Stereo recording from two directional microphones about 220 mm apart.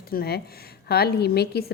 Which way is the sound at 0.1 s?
45° left (ahead or behind).